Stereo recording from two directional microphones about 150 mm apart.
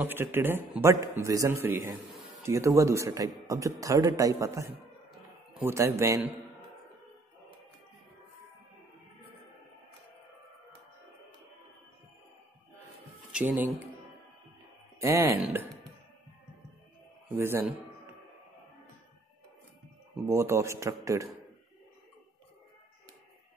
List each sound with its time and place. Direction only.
0.0 s a man's voice: 15° right (ahead or behind)
2.0 s a sound: centre (ahead or behind)
2.4 s a man's voice: 20° right (ahead or behind)
13.3 s a man's voice: 10° right (ahead or behind)
15.0 s a man's voice: 20° right (ahead or behind)
17.4 s a man's voice: 15° right (ahead or behind)
20.2 s a man's voice: 20° right (ahead or behind)